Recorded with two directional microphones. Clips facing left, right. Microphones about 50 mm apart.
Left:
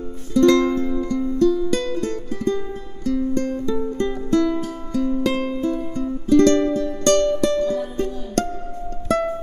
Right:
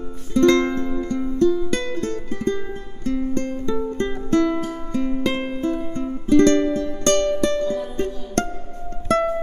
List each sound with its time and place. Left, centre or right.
0.3 s music: right
4.6 s music: right